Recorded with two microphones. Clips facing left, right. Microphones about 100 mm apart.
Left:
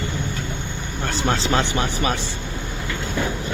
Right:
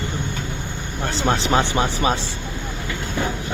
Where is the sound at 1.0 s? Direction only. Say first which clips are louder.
Right 1 dB; 20° right (ahead or behind).